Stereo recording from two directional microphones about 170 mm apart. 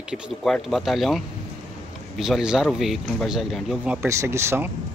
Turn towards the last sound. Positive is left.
turn(degrees=-15)  # may be behind; listen again after turning